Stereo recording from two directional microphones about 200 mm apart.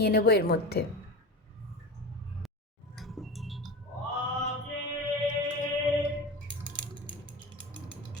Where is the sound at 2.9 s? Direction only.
Centre (ahead or behind).